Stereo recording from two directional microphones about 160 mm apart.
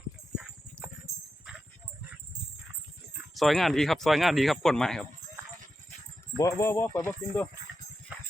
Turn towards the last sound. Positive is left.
turn(degrees=15)  # may be behind; listen again after turning